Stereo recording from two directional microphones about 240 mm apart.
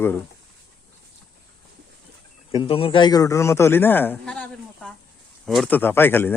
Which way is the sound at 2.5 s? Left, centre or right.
Left.